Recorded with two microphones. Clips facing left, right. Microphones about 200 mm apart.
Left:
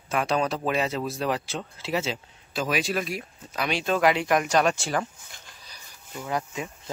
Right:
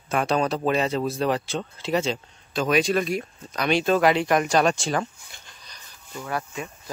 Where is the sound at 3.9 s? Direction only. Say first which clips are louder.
Right 1 dB; 35° right (ahead or behind).